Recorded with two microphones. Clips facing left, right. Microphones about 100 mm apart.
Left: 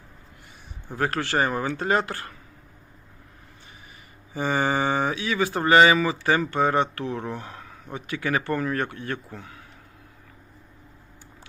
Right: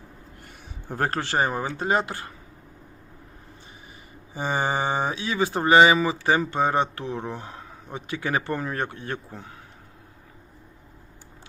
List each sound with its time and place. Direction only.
0.9 s speech: 40° right (ahead or behind)
1.2 s speech: 25° right (ahead or behind)
4.4 s speech: 20° right (ahead or behind)